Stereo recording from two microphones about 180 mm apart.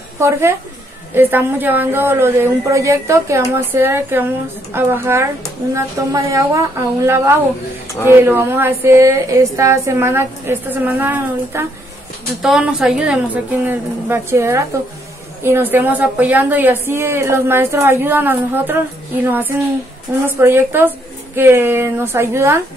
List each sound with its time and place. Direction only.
0.2 s a woman's voice: 15° right (ahead or behind)